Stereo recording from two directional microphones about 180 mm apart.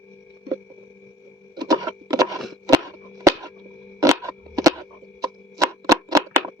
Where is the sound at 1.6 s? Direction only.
20° right (ahead or behind).